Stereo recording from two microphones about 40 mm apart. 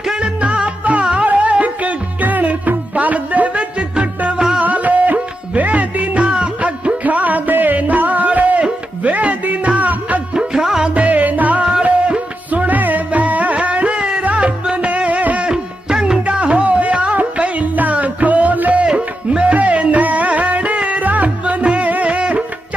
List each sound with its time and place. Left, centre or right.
0.0 s music: centre
0.4 s music: right
4.4 s music: right
4.6 s music: right
6.2 s music: right
6.6 s music: right
10.3 s music: centre
10.9 s music: right
11.8 s music: right
12.5 s music: right
15.4 s music: centre
16.2 s music: right
18.8 s music: right